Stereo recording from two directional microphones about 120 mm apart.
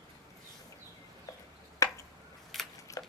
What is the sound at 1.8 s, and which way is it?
Finger snapping, 25° left (ahead or behind).